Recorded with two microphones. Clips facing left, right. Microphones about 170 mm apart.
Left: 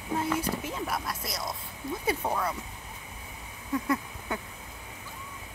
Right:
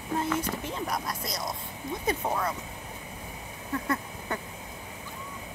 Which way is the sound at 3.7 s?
10° left (ahead or behind).